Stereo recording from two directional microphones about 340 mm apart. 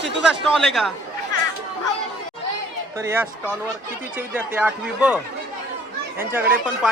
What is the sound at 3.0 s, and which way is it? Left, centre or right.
Speech, centre.